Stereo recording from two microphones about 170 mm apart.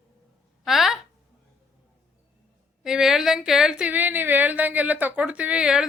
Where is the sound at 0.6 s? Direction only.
Centre (ahead or behind).